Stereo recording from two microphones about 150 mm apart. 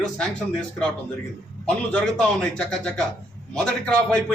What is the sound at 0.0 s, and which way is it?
A man's voice, 5° left (ahead or behind).